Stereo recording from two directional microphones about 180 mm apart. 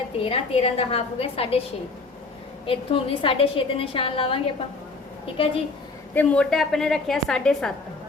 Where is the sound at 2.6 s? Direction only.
30° left (ahead or behind).